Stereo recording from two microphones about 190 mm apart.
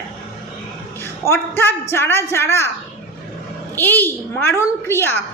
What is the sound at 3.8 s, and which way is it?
A man's voice, 10° left (ahead or behind).